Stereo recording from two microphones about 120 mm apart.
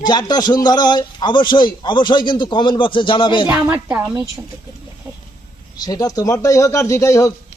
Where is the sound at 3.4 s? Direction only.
15° right (ahead or behind).